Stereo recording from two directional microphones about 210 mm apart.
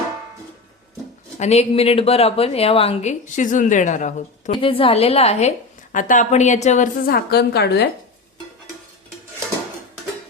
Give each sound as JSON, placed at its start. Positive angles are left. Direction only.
{"t": 1.4, "sound": "speech", "side_deg": 30}
{"t": 4.5, "sound": "a woman's voice", "side_deg": 25}